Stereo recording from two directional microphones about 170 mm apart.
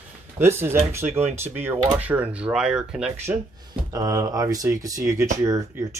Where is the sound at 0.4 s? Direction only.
15° right (ahead or behind).